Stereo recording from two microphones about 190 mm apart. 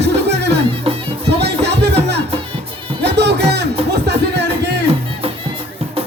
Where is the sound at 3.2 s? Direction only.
60° right (ahead or behind).